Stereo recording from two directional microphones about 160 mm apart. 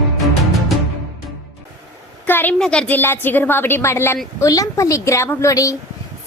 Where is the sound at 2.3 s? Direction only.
10° left (ahead or behind).